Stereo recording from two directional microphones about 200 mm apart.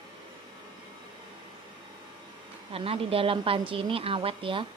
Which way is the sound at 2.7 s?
25° right (ahead or behind).